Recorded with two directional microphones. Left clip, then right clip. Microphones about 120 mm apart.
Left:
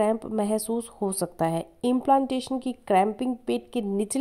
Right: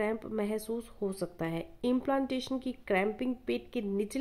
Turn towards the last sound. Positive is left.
turn(degrees=45)  # may be behind; listen again after turning